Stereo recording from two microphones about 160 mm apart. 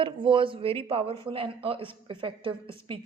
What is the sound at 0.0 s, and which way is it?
A woman's voice, 30° right (ahead or behind).